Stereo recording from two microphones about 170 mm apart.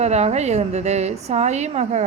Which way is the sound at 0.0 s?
40° right (ahead or behind).